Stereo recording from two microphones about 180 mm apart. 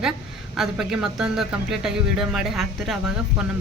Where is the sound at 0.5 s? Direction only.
Centre (ahead or behind).